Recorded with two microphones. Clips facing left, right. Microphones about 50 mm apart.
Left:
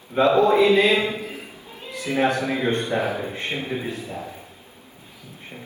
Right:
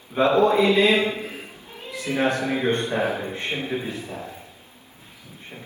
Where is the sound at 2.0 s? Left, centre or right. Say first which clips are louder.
Left 1 dB; left.